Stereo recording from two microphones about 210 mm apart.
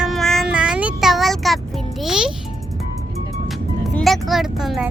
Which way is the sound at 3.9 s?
Centre (ahead or behind).